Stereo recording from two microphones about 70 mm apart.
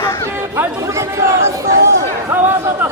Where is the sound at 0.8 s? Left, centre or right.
Right.